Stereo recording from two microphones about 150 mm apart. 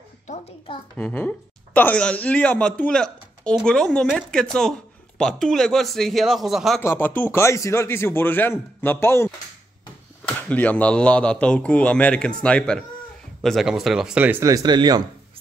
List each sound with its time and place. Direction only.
0.9 s a man's voice: 10° left (ahead or behind)
6.8 s speech: 15° left (ahead or behind); by 15.0 s 30° right (ahead or behind)